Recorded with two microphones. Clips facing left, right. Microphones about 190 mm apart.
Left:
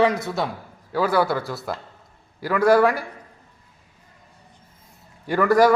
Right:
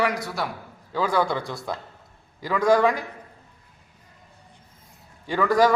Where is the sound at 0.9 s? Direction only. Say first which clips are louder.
Left 3 dB; 10° left (ahead or behind).